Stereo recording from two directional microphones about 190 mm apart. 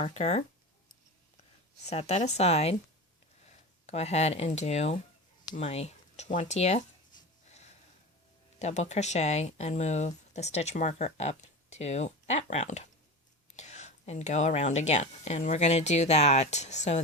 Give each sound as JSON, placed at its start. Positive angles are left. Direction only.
{"t": 0.0, "sound": "speech", "side_deg": 35}
{"t": 1.9, "sound": "speech", "side_deg": 35}
{"t": 3.8, "sound": "speech", "side_deg": 35}
{"t": 8.5, "sound": "speech", "side_deg": 35}